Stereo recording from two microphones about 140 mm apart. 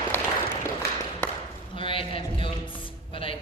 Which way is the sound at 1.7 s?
40° left (ahead or behind).